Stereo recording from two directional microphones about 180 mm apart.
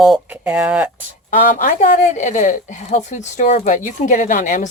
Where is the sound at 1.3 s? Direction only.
50° left (ahead or behind).